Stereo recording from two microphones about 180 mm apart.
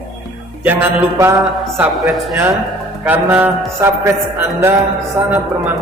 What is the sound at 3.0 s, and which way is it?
Music, 10° right (ahead or behind).